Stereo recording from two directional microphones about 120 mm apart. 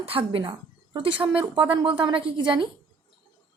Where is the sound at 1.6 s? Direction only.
45° right (ahead or behind).